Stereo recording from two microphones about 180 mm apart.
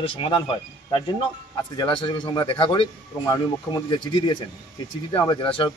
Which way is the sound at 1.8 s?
25° left (ahead or behind).